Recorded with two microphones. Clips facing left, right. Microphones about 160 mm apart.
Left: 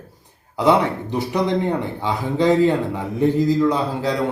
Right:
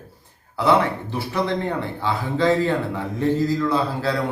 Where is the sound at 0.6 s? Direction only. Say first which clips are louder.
Left 2 dB; 20° left (ahead or behind).